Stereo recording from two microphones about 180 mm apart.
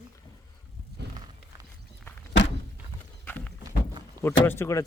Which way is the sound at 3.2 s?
10° left (ahead or behind).